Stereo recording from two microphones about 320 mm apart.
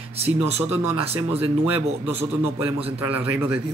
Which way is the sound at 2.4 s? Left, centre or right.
Centre.